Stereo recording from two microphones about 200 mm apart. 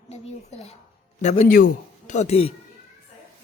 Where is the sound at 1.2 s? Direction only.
35° left (ahead or behind).